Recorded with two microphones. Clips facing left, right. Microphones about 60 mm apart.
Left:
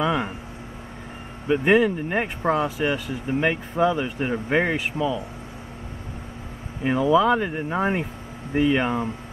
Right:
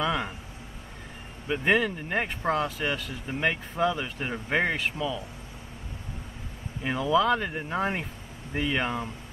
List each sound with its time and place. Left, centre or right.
0.0 s speech: centre
1.5 s speech: centre
6.8 s speech: centre